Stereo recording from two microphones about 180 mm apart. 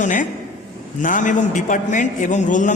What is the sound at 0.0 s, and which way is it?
A man's voice, 45° left (ahead or behind).